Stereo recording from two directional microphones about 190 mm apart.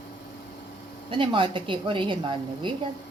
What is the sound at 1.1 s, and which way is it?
A woman's voice, 25° right (ahead or behind).